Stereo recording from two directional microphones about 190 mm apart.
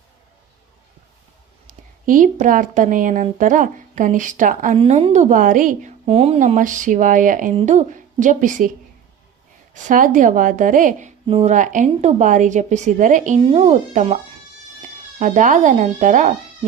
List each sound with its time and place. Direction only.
1.6 s speech: 45° right (ahead or behind)
4.8 s a woman's voice: 30° right (ahead or behind)
6.1 s a woman's voice: 30° right (ahead or behind)
9.7 s speech: 45° right (ahead or behind)
11.3 s speech: 30° right (ahead or behind)
11.5 s a woman's voice: 40° right (ahead or behind)